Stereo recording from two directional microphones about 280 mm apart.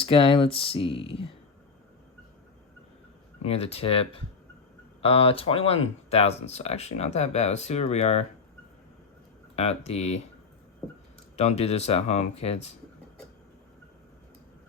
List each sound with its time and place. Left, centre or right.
0.0 s speech: centre
3.4 s speech: left
9.6 s speech: left
11.3 s speech: left